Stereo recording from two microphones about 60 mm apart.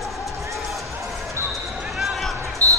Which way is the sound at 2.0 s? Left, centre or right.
Centre.